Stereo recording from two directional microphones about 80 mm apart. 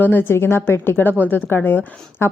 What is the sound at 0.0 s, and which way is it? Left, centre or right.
Speech, left.